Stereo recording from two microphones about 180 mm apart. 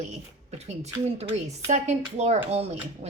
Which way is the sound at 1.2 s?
35° right (ahead or behind).